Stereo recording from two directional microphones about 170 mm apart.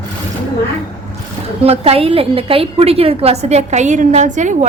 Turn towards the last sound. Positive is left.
turn(degrees=-45)  # may be behind; listen again after turning